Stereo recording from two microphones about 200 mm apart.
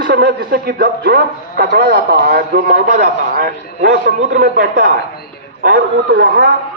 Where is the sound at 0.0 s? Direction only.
55° right (ahead or behind).